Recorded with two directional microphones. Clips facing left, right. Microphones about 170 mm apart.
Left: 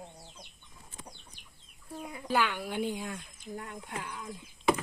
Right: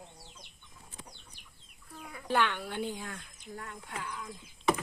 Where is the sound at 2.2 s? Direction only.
5° left (ahead or behind).